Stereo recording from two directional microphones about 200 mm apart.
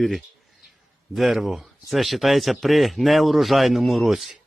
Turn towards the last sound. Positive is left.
turn(degrees=0)  # may be behind; listen again after turning